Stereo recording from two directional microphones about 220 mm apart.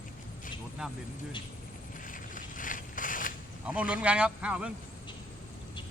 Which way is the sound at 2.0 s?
35° left (ahead or behind).